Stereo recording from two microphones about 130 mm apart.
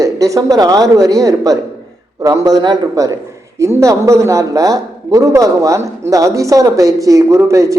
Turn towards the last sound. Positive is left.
turn(degrees=-25)  # may be behind; listen again after turning